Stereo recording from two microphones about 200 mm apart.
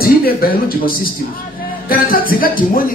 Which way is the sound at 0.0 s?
50° left (ahead or behind).